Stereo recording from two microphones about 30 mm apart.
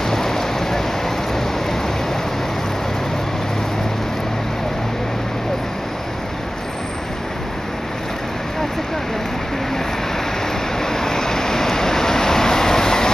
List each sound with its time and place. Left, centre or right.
0.0 s rain: centre
10.8 s vehicle: centre